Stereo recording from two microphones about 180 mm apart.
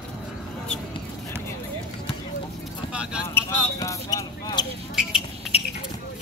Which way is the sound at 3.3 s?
15° left (ahead or behind).